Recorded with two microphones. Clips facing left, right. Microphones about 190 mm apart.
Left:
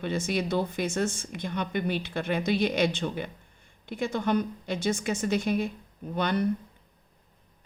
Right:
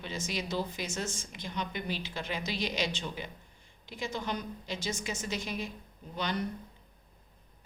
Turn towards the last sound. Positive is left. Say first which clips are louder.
# left 7 dB
turn(degrees=55)  # may be behind; listen again after turning